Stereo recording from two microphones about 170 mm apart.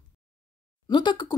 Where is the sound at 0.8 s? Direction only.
25° left (ahead or behind).